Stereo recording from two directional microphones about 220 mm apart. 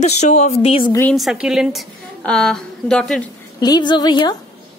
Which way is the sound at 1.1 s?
Centre (ahead or behind).